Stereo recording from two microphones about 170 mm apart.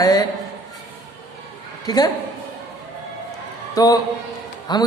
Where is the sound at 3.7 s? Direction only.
20° left (ahead or behind).